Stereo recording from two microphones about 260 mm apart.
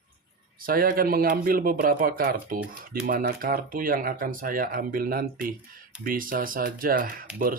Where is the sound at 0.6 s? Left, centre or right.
Right.